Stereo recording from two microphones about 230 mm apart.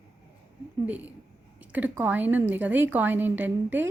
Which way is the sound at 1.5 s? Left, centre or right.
Centre.